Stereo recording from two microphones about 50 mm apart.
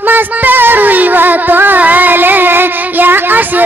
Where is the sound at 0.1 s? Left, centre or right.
Right.